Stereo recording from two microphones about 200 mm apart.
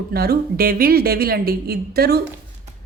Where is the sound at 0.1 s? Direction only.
50° right (ahead or behind).